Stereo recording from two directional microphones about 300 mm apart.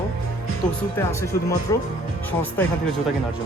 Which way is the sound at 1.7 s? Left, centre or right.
Centre.